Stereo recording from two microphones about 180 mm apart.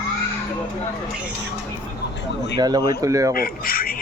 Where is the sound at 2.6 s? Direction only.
20° right (ahead or behind).